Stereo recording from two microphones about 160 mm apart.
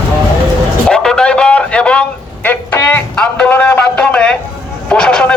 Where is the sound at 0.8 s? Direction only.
5° left (ahead or behind).